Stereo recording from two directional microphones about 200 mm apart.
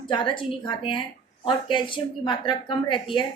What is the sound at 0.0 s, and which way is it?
Speech, 25° left (ahead or behind).